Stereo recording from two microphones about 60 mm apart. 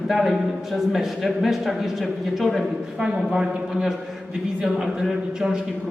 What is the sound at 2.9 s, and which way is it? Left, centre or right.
Speech, centre.